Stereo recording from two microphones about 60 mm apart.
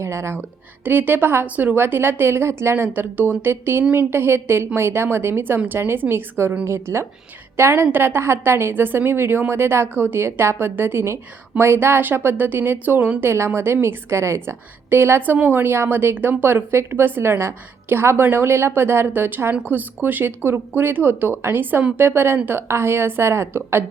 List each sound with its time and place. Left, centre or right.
0.0 s a woman's voice: right
0.9 s a woman's voice: right
2.7 s a woman's voice: right
13.3 s a woman's voice: right